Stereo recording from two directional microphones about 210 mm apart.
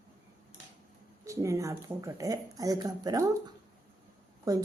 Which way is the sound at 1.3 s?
15° right (ahead or behind).